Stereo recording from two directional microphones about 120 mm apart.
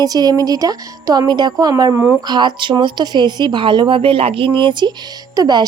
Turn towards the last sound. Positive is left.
turn(degrees=-35)  # may be behind; listen again after turning